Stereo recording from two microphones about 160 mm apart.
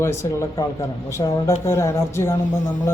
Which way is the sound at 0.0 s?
15° left (ahead or behind).